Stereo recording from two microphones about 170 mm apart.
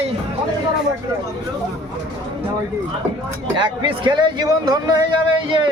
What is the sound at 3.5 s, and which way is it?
Speech, 25° right (ahead or behind).